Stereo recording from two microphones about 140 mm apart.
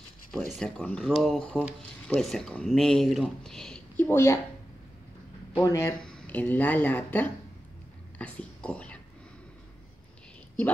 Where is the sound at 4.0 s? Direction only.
15° left (ahead or behind).